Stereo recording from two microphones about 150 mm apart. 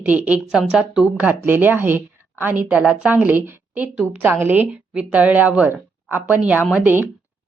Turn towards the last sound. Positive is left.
turn(degrees=-10)  # may be behind; listen again after turning